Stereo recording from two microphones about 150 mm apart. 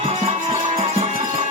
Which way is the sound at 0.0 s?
45° right (ahead or behind).